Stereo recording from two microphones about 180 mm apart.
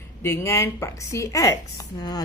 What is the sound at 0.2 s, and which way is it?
A woman's voice, 15° left (ahead or behind).